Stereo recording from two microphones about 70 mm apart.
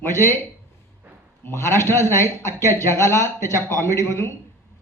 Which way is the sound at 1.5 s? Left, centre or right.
Left.